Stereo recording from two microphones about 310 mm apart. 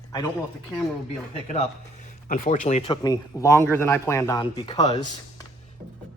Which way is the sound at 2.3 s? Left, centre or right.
Left.